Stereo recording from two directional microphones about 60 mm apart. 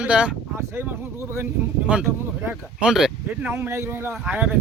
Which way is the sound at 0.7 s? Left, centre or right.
Right.